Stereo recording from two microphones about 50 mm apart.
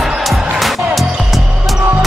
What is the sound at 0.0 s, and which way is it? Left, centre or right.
Music, centre.